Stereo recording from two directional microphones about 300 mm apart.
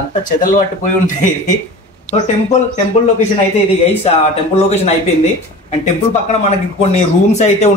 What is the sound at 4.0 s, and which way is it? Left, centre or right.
Speech, left.